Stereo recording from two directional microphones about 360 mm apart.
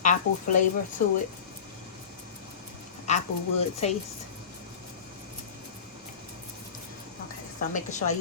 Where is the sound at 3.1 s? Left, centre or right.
Centre.